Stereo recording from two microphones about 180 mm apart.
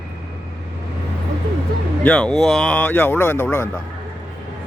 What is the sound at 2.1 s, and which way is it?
Speech, 5° left (ahead or behind).